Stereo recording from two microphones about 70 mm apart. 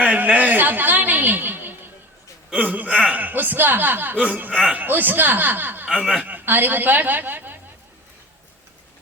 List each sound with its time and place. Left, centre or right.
0.0 s a sound: centre
2.6 s speech: right
5.9 s speech: centre
6.3 s a woman's voice: right